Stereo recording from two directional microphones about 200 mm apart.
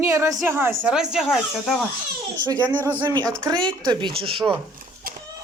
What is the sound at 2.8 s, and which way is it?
Speech, 10° left (ahead or behind).